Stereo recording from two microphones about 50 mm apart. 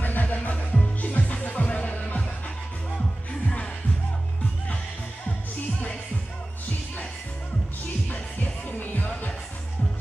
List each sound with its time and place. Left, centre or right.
0.0 s music: left
8.1 s music: left